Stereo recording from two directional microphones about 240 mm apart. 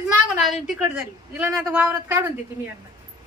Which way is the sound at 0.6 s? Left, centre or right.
Centre.